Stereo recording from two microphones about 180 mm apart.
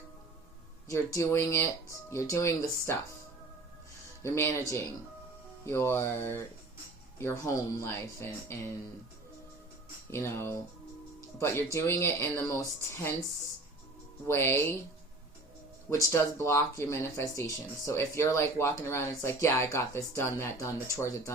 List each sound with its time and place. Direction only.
0.9 s speech: 15° left (ahead or behind)
4.2 s speech: 15° left (ahead or behind)
5.6 s speech: 15° left (ahead or behind)
10.1 s speech: 15° left (ahead or behind)
14.3 s speech: 10° left (ahead or behind)
15.9 s speech: 15° left (ahead or behind)